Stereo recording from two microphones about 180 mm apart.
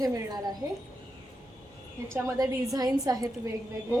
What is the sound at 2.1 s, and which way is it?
A woman's voice, 15° right (ahead or behind).